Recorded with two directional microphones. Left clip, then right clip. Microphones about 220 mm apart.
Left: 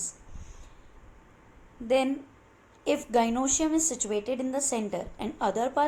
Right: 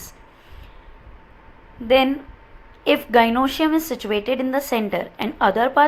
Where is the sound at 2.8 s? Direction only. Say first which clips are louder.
Right 10 dB; 20° right (ahead or behind).